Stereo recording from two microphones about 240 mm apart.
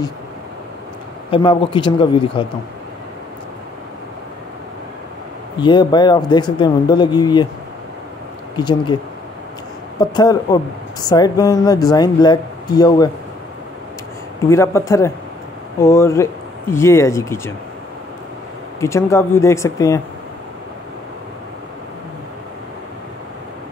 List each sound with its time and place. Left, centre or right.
1.3 s speech: centre
5.6 s speech: centre
8.5 s speech: centre
9.9 s speech: centre
14.5 s speech: centre
18.8 s speech: centre